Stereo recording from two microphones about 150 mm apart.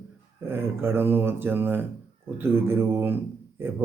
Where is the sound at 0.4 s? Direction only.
15° right (ahead or behind).